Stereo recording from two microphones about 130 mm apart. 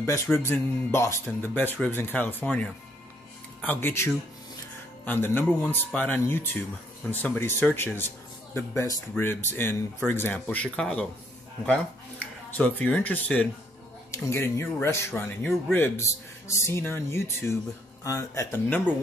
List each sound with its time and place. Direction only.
0.0 s speech: 20° left (ahead or behind)
12.4 s speech: 10° left (ahead or behind)